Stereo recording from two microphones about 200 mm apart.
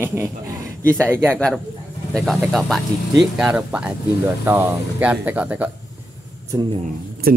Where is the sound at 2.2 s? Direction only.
Centre (ahead or behind).